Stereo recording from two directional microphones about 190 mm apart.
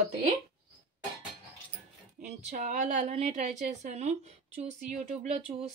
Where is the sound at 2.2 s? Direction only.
40° right (ahead or behind).